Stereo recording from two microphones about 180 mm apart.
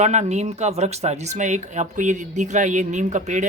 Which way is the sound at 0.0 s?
40° right (ahead or behind).